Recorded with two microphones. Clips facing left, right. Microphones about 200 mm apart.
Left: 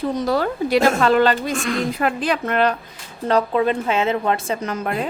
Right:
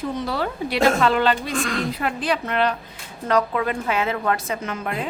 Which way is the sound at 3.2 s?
30° left (ahead or behind).